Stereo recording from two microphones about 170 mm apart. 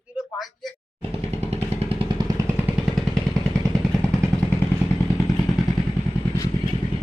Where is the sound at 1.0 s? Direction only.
40° right (ahead or behind); by 2.7 s 15° right (ahead or behind).